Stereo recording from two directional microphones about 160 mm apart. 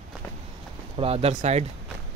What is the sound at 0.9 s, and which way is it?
Speech, 35° right (ahead or behind).